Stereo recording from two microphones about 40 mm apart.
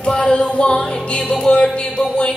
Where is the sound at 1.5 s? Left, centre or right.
Left.